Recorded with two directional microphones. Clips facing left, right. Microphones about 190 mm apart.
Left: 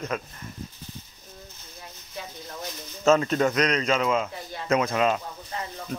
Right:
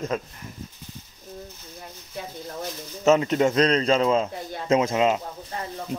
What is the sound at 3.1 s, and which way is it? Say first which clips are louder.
Speech: right 2 dB; 20° right (ahead or behind).